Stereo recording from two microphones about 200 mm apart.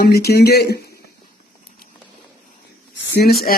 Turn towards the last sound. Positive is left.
turn(degrees=50)  # may be behind; listen again after turning